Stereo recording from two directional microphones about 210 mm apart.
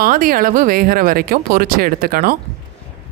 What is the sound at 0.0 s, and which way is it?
Speech, 40° right (ahead or behind).